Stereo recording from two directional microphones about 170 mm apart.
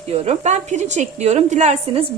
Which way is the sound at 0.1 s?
35° right (ahead or behind).